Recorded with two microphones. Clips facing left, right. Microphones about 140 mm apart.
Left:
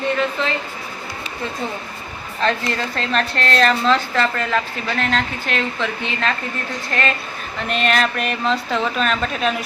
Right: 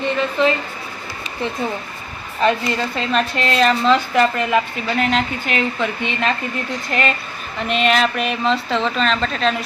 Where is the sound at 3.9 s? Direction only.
15° right (ahead or behind).